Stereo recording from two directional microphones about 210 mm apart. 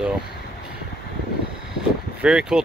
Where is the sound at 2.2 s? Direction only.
5° right (ahead or behind).